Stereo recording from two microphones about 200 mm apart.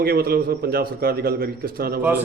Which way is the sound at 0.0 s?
50° right (ahead or behind).